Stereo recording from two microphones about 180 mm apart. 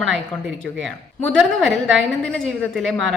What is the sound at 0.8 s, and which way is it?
Speech, 90° right.